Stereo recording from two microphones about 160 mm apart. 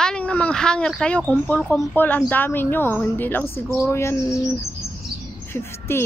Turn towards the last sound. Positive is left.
turn(degrees=15)  # may be behind; listen again after turning